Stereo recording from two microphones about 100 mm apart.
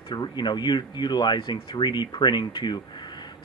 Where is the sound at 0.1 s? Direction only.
45° left (ahead or behind).